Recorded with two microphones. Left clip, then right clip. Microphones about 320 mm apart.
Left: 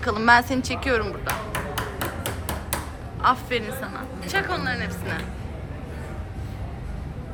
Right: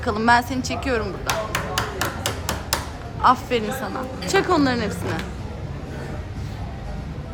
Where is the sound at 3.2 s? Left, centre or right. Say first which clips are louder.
Right 4 dB; centre.